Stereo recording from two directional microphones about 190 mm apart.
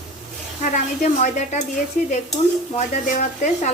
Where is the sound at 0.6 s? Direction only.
45° left (ahead or behind).